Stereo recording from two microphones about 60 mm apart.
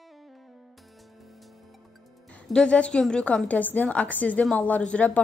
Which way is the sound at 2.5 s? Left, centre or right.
Centre.